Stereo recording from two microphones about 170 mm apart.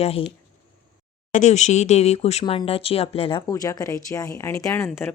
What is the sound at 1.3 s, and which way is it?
Speech, 45° left (ahead or behind).